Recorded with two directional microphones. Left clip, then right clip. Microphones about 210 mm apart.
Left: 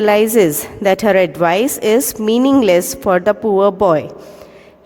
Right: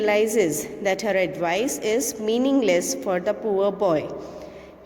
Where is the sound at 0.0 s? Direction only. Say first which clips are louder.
Left 9 dB; 50° left (ahead or behind).